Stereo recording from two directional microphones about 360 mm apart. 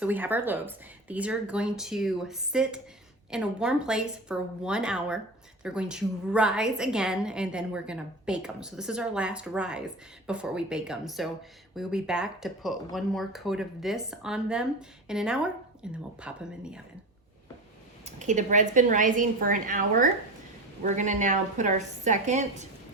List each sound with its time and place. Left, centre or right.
0.0 s a woman's voice: centre
18.0 s a woman's voice: centre